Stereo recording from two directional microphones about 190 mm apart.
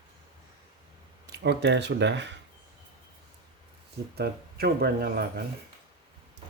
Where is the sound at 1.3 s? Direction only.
60° right (ahead or behind).